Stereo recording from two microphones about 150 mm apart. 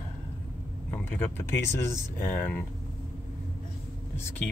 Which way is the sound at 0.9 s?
15° left (ahead or behind).